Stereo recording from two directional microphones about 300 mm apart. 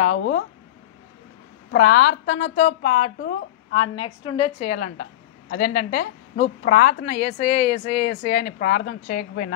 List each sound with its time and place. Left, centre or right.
0.0 s a woman's voice: left
1.7 s a woman's voice: left
3.3 s a woman's voice: left
3.9 s a woman's voice: centre